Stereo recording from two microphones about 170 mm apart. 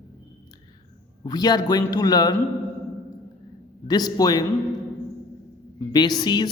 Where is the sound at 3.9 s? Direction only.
25° left (ahead or behind).